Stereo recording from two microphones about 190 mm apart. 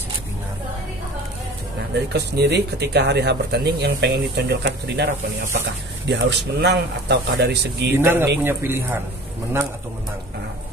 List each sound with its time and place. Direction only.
2.1 s speech: 60° right (ahead or behind)
8.0 s speech: 10° right (ahead or behind)